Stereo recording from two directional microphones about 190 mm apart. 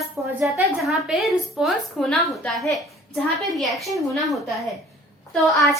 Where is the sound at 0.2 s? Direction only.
Centre (ahead or behind).